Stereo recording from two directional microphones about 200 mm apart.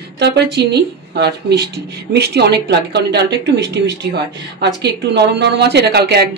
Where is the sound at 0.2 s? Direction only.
55° right (ahead or behind).